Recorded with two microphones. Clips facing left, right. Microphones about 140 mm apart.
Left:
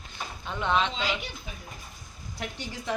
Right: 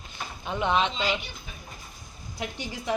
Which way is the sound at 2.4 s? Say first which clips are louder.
Right 2 dB; 10° right (ahead or behind).